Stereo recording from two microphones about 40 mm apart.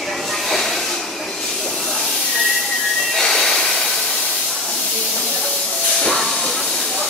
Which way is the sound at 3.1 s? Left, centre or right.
Centre.